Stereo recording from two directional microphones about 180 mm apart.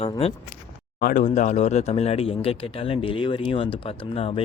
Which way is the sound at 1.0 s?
50° left (ahead or behind).